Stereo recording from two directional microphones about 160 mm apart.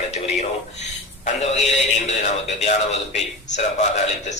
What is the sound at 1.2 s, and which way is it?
A man's voice, 45° left (ahead or behind).